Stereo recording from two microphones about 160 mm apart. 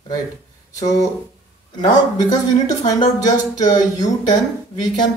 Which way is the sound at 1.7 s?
25° left (ahead or behind).